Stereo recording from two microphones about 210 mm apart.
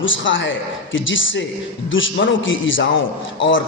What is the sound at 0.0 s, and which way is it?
A man's voice, 65° left (ahead or behind).